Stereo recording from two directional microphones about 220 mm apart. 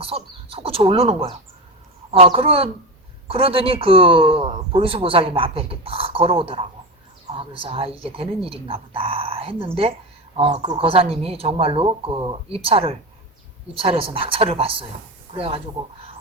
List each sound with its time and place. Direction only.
0.0 s a man's voice: 25° right (ahead or behind)